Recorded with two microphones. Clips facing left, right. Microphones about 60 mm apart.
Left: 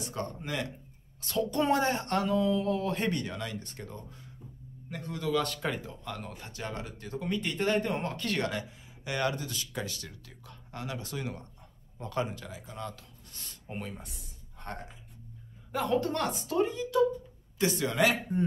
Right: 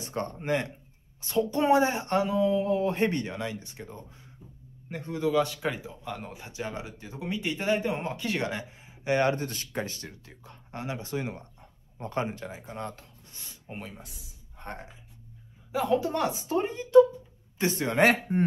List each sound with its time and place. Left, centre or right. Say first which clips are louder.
0.0 s speech: right 3 dB; right
1.2 s speech: right 3 dB; right
4.8 s speech: right 5 dB; right
13.3 s speech: left 1 dB; centre
14.6 s speech: right 1 dB; centre
15.7 s a woman's voice: right 3 dB; centre
16.5 s speech: right 7 dB; right